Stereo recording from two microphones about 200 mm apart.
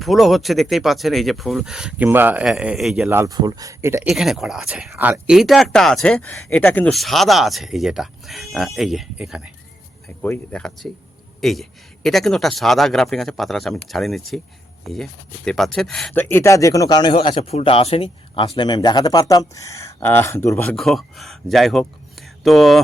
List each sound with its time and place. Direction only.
0.0 s speech: centre (ahead or behind)
4.1 s speech: centre (ahead or behind)
10.2 s speech: 5° left (ahead or behind)
16.3 s speech: 15° left (ahead or behind)
20.7 s speech: centre (ahead or behind)